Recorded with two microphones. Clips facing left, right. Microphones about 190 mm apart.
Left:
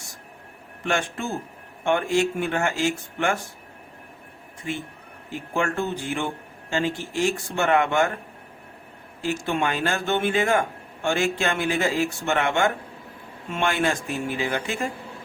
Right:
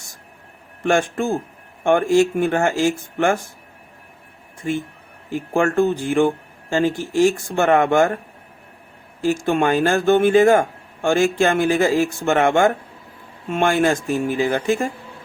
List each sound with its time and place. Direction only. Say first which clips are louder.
0.9 s a man's voice: right 8 dB; 45° right (ahead or behind)
4.6 s a man's voice: right 7 dB; 45° right (ahead or behind)
9.2 s a man's voice: right 7 dB; 45° right (ahead or behind)